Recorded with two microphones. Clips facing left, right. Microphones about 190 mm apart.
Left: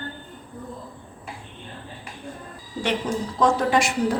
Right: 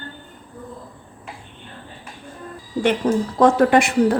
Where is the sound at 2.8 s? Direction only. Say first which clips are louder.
Right 7 dB; 55° right (ahead or behind).